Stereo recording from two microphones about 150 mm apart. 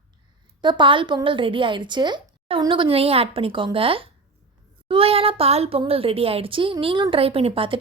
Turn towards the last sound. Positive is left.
turn(degrees=-35)  # may be behind; listen again after turning